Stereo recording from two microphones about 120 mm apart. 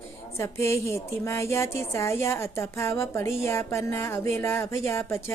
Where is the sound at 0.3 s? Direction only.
25° left (ahead or behind).